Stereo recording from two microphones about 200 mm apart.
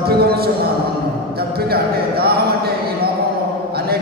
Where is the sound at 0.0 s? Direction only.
50° right (ahead or behind).